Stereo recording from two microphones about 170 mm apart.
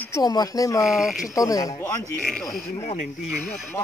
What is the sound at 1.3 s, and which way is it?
Speech, 20° left (ahead or behind).